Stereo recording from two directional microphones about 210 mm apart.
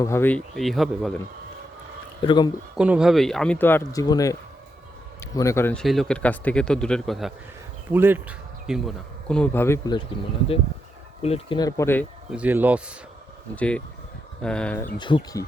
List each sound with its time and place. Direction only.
0.0 s speech: 10° left (ahead or behind)
2.2 s speech: 20° left (ahead or behind)
2.7 s speech: 5° right (ahead or behind); by 10.0 s 15° left (ahead or behind)
11.2 s speech: 25° left (ahead or behind)
12.3 s speech: 5° right (ahead or behind)
13.6 s speech: 5° left (ahead or behind)
14.9 s speech: 20° left (ahead or behind)